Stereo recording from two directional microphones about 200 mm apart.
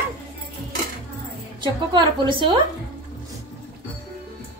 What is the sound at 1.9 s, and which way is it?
Speech, 25° right (ahead or behind).